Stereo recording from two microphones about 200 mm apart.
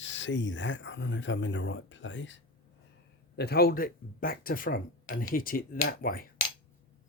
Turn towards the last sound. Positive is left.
turn(degrees=45)  # may be behind; listen again after turning